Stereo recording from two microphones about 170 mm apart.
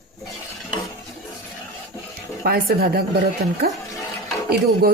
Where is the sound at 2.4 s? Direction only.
65° right (ahead or behind).